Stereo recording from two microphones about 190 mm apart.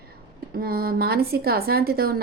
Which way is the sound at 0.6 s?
50° right (ahead or behind).